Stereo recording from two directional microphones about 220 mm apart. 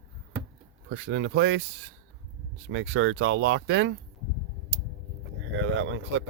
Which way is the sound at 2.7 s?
60° right (ahead or behind).